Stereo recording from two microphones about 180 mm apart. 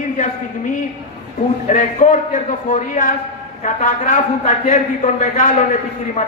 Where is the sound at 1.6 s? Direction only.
45° left (ahead or behind).